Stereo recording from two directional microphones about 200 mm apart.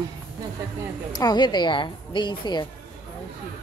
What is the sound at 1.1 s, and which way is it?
A woman's voice, 20° left (ahead or behind).